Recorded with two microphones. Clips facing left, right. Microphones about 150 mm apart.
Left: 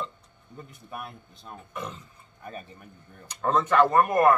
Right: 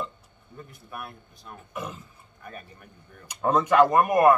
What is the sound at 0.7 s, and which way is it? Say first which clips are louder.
Speech: left 1 dB; 20° left (ahead or behind).